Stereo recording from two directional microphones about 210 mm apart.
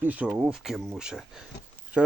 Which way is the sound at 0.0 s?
10° right (ahead or behind).